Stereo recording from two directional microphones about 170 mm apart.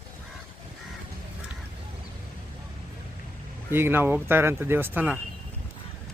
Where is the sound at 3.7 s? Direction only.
15° right (ahead or behind).